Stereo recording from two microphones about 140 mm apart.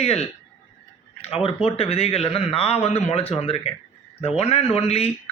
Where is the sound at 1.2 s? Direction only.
45° left (ahead or behind).